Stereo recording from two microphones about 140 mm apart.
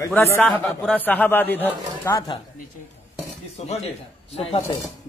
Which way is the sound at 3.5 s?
50° left (ahead or behind).